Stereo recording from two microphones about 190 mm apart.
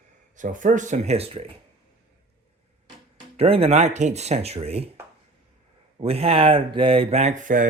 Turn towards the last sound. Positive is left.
turn(degrees=-45)  # may be behind; listen again after turning